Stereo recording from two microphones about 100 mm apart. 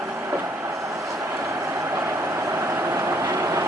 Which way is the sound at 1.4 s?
25° right (ahead or behind).